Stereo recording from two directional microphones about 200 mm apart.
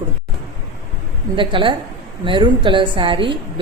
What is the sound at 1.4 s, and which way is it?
A woman's voice, 25° right (ahead or behind).